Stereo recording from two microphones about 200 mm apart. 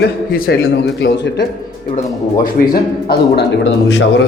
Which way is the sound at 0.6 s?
65° left (ahead or behind).